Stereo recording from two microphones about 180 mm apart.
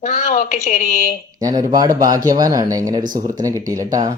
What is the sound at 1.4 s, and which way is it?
Speech, 20° right (ahead or behind).